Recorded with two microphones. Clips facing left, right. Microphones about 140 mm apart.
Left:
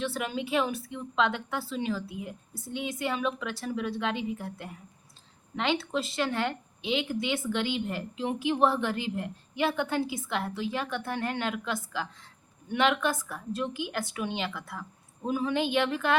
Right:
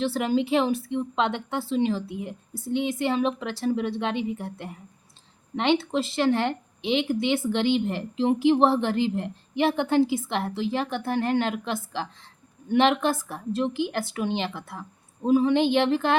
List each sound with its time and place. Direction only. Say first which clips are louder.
0.0 s a woman's voice: right 8 dB; 30° right (ahead or behind)